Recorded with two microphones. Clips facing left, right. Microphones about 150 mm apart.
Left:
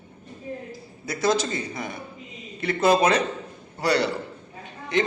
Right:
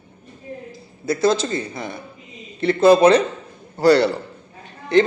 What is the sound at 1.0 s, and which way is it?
A man's voice, 30° right (ahead or behind).